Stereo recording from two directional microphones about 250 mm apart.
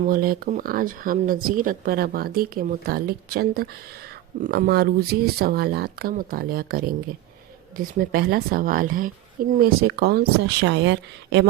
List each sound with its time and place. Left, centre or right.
0.0 s speech: right